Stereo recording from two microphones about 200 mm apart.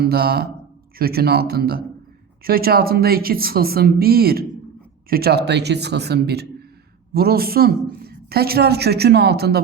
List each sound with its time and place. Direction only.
0.0 s a woman's voice: 50° right (ahead or behind)